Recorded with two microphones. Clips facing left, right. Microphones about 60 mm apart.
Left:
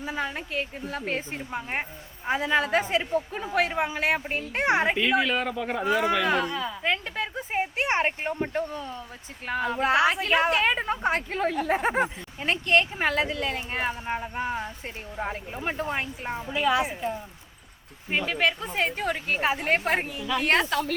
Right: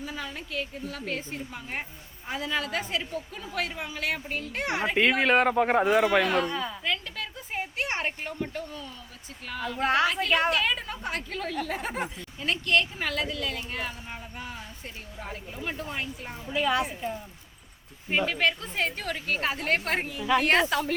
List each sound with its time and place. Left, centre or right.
0.0 s speech: left
4.9 s speech: right
6.3 s speech: centre
6.8 s speech: left
9.7 s speech: centre
10.5 s speech: left
16.5 s a woman's voice: centre
18.3 s a woman's voice: centre